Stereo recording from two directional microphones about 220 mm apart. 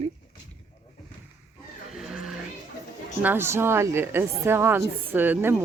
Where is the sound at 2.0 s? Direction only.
Centre (ahead or behind).